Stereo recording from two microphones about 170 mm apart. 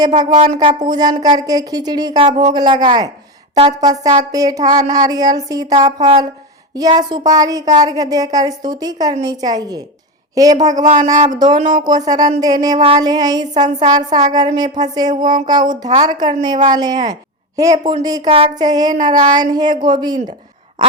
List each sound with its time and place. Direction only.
0.0 s a woman's voice: 25° right (ahead or behind)
10.8 s speech: 45° right (ahead or behind)
11.3 s a woman's voice: 25° right (ahead or behind)
12.7 s a sound: 35° right (ahead or behind)
13.0 s a woman's voice: 25° right (ahead or behind)
18.2 s a woman's voice: 35° right (ahead or behind)